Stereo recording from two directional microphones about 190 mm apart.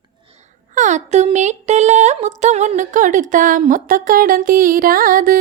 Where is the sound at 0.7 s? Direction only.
40° right (ahead or behind).